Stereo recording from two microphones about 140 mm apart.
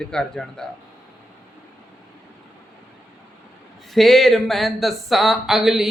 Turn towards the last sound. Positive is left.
turn(degrees=0)  # may be behind; listen again after turning